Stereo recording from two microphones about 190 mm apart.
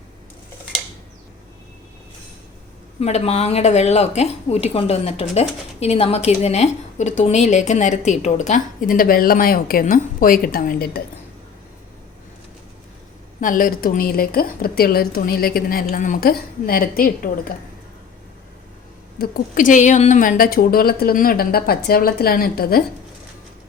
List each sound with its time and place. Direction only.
3.0 s a woman's voice: 35° left (ahead or behind); by 11.0 s 55° left (ahead or behind)
13.4 s speech: 45° left (ahead or behind)
15.9 s speech: 40° left (ahead or behind)
19.2 s speech: 45° left (ahead or behind)